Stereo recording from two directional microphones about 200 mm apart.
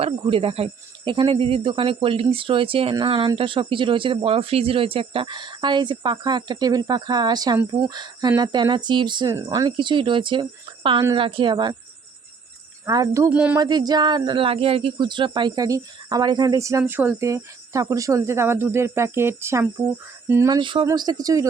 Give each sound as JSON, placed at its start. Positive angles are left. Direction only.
{"t": 0.0, "sound": "speech", "side_deg": -30}
{"t": 12.8, "sound": "speech", "side_deg": -15}
{"t": 13.6, "sound": "speech", "side_deg": -20}